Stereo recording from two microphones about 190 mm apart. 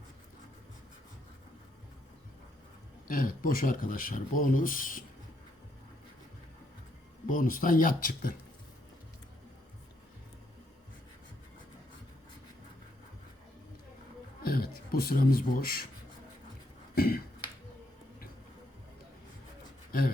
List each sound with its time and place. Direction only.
3.1 s speech: 45° left (ahead or behind)
7.3 s speech: 45° left (ahead or behind)
14.4 s a man's voice: 50° left (ahead or behind)
16.9 s a sound: 55° left (ahead or behind)